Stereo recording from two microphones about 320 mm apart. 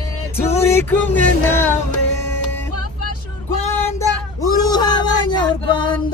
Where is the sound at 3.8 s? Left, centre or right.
Centre.